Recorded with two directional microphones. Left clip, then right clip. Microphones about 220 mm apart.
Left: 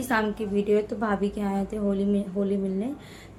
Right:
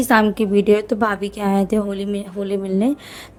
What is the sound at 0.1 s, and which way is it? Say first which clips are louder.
A woman's voice: right 10 dB; 45° right (ahead or behind).